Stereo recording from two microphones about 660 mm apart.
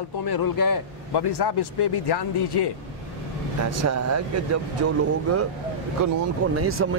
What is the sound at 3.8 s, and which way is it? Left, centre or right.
Speech, right.